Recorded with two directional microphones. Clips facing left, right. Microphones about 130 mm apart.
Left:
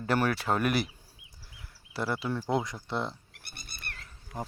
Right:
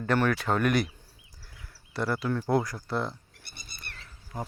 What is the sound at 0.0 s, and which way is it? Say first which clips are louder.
Speech: right 2 dB; 10° left (ahead or behind).